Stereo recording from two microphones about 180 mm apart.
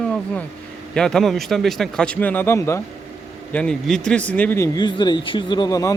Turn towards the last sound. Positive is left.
turn(degrees=20)  # may be behind; listen again after turning